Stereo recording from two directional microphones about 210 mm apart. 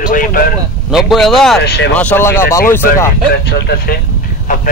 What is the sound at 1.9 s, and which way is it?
Speech, 10° left (ahead or behind).